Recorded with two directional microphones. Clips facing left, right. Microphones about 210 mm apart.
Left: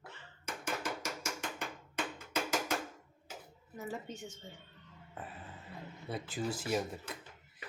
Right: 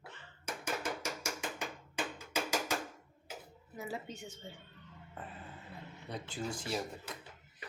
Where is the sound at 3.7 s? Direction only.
10° right (ahead or behind).